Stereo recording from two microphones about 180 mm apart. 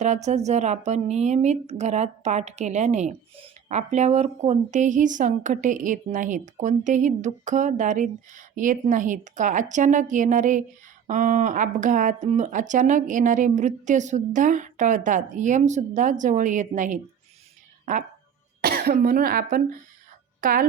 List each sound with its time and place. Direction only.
0.0 s a woman's voice: 40° right (ahead or behind)
18.6 s speech: 55° right (ahead or behind)